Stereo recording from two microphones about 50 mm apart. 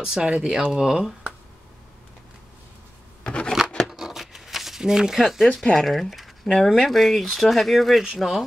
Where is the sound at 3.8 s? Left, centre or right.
Centre.